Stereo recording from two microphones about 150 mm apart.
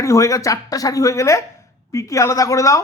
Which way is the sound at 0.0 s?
20° left (ahead or behind).